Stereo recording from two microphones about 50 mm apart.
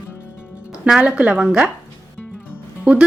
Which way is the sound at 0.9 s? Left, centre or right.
Centre.